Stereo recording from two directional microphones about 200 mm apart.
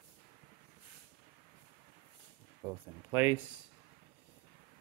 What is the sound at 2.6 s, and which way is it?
Speech, 10° right (ahead or behind).